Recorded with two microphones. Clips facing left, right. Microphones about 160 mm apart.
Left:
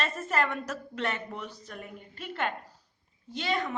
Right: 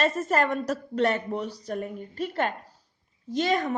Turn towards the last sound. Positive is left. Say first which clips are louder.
# right 6 dB
turn(degrees=-45)  # may be behind; listen again after turning